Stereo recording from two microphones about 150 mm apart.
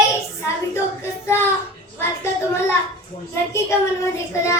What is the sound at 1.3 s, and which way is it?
Speech, 15° left (ahead or behind).